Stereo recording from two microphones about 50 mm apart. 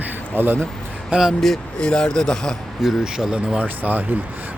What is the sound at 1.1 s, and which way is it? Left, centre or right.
Speech, centre.